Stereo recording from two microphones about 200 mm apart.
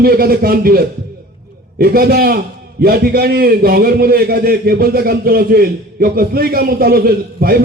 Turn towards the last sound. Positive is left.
turn(degrees=-50)  # may be behind; listen again after turning